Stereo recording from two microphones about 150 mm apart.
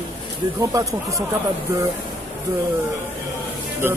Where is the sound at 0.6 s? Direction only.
20° right (ahead or behind).